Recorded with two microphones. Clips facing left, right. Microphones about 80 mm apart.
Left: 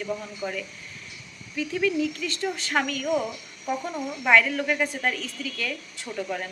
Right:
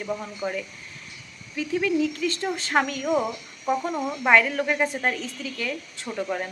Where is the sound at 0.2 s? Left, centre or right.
Centre.